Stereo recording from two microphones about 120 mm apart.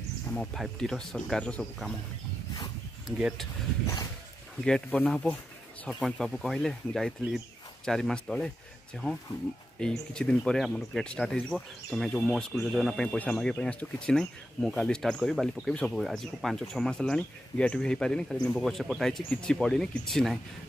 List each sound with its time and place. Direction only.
0.3 s speech: 5° left (ahead or behind)
2.5 s dog: 35° left (ahead or behind)
3.2 s speech: 5° right (ahead or behind)
4.6 s speech: 5° left (ahead or behind)
9.8 s speech: 5° left (ahead or behind)